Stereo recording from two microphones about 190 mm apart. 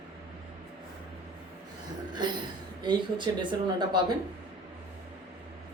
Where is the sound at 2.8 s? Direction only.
25° right (ahead or behind).